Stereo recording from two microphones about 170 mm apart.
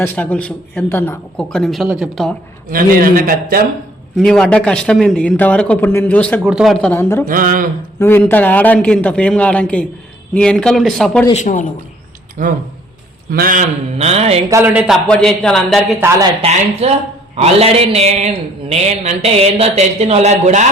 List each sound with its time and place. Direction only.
0.0 s a man's voice: 10° left (ahead or behind)
2.6 s speech: 55° right (ahead or behind)
4.2 s a man's voice: 5° left (ahead or behind)
6.5 s speech: 5° right (ahead or behind)
6.7 s a man's voice: 10° left (ahead or behind)
7.3 s a man's voice: 55° right (ahead or behind)
7.9 s a man's voice: 15° left (ahead or behind)
11.3 s speech: 50° left (ahead or behind)
12.4 s a man's voice: 50° right (ahead or behind)
14.5 s speech: 10° right (ahead or behind)
15.1 s speech: 5° left (ahead or behind)
16.4 s a man's voice: 40° right (ahead or behind)